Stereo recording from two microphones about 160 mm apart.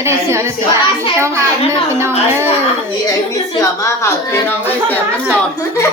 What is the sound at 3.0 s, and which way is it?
Speech, 20° left (ahead or behind).